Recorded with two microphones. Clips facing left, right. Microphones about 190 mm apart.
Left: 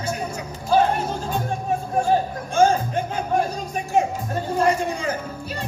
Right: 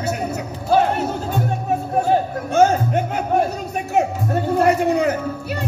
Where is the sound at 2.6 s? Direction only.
65° right (ahead or behind).